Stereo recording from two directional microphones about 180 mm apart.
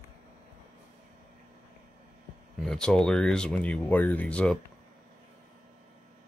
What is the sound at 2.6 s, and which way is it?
Speech, 5° left (ahead or behind).